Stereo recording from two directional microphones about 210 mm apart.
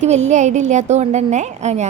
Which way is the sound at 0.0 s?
35° right (ahead or behind).